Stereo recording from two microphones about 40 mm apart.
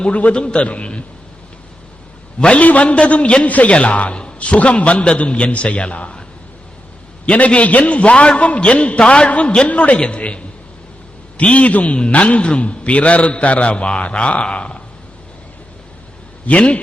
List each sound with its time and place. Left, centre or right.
0.0 s a man's voice: left
2.4 s a man's voice: left
7.3 s a man's voice: left
16.5 s a man's voice: left